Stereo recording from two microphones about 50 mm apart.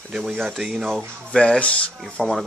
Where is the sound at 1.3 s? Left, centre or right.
Centre.